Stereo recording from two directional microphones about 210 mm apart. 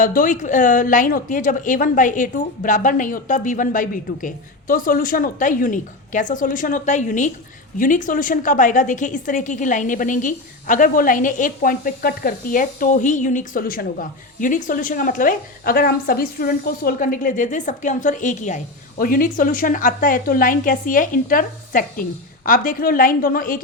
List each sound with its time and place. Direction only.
0.0 s a woman's voice: 40° left (ahead or behind)